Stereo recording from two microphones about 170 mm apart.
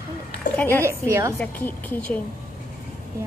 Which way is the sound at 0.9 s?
15° right (ahead or behind).